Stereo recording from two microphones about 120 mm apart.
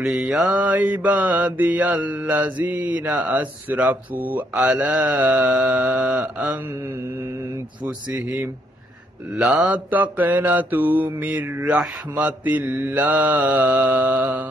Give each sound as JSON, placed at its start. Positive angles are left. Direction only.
{"t": 0.0, "sound": "mantra", "side_deg": -5}
{"t": 9.4, "sound": "mantra", "side_deg": -10}